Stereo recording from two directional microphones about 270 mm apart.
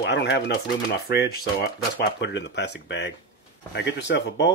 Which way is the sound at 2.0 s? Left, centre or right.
Left.